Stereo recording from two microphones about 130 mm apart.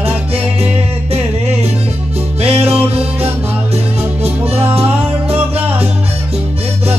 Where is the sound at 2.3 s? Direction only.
50° right (ahead or behind).